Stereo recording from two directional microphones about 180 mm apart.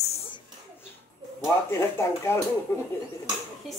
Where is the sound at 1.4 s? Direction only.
15° left (ahead or behind).